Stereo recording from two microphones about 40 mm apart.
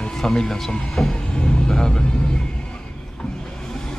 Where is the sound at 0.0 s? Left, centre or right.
Centre.